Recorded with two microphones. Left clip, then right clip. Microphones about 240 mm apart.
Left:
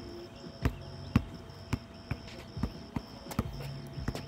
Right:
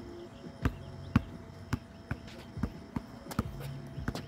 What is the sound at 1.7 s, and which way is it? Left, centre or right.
Basketball bounce, centre.